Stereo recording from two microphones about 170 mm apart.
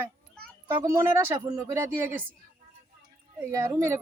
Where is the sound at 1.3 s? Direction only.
20° right (ahead or behind).